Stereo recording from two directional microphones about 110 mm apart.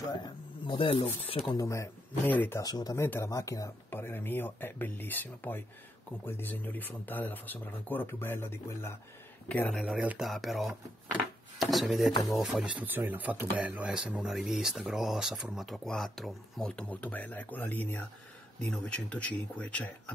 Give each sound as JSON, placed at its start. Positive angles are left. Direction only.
{"t": 0.0, "sound": "speech", "side_deg": 40}
{"t": 1.6, "sound": "speech", "side_deg": 30}
{"t": 2.2, "sound": "speech", "side_deg": 15}
{"t": 2.6, "sound": "speech", "side_deg": 35}
{"t": 9.5, "sound": "speech", "side_deg": 5}
{"t": 12.7, "sound": "speech", "side_deg": -15}